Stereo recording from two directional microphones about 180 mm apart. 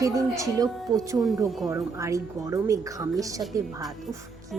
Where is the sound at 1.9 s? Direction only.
15° right (ahead or behind).